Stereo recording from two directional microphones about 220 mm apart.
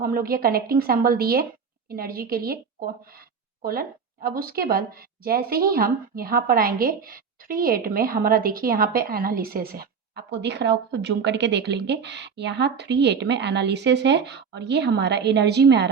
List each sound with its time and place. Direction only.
0.0 s a woman's voice: 40° right (ahead or behind)